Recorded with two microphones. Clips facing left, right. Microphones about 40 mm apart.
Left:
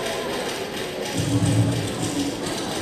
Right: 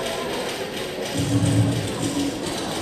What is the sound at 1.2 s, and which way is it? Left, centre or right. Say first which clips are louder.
Music: right 1 dB; centre.